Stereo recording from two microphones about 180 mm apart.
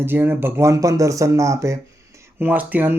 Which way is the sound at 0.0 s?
10° right (ahead or behind).